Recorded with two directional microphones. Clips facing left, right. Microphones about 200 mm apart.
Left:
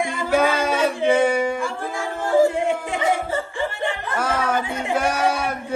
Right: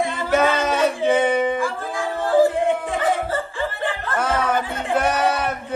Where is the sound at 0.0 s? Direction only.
15° left (ahead or behind).